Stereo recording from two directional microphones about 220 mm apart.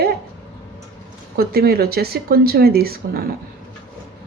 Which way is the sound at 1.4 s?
45° right (ahead or behind).